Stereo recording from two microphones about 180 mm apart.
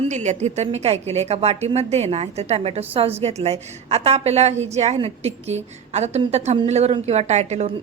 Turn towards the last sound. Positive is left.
turn(degrees=-40)  # may be behind; listen again after turning